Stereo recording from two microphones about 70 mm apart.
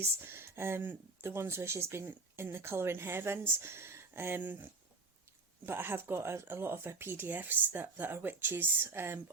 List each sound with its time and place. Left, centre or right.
0.0 s speech: right